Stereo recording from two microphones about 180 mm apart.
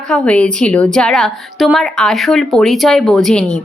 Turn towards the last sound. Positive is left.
turn(degrees=5)  # may be behind; listen again after turning